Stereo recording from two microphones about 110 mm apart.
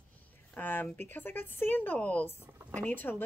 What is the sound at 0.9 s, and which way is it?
A woman's voice, 20° left (ahead or behind).